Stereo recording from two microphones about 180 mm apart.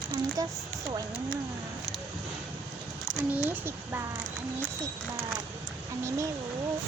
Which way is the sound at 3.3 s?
10° right (ahead or behind).